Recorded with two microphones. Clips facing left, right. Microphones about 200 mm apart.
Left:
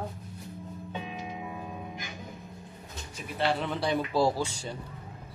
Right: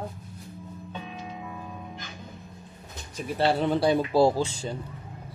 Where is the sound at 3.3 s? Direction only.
35° right (ahead or behind).